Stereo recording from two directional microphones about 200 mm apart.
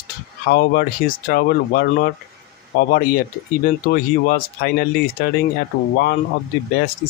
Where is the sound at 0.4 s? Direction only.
50° left (ahead or behind).